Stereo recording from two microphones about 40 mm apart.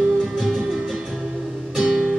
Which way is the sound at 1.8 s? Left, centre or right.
Centre.